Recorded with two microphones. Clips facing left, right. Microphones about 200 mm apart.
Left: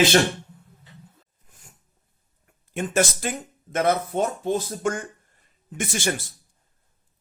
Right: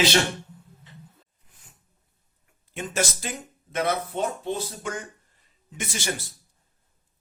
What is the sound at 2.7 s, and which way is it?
Speech, 50° left (ahead or behind).